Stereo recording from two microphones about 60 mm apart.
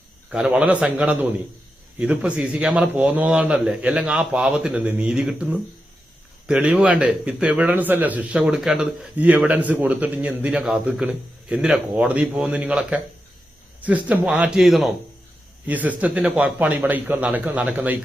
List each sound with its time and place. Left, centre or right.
0.3 s speech: centre
9.1 s speech: right
10.6 s a man's voice: centre
11.0 s speech: centre
13.8 s speech: right
14.5 s a man's voice: centre
15.6 s speech: right
16.6 s speech: right